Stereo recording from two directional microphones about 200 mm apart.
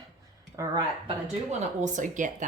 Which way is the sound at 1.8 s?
40° right (ahead or behind).